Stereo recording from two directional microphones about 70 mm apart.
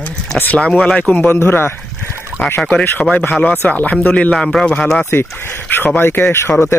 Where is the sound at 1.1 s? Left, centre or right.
Left.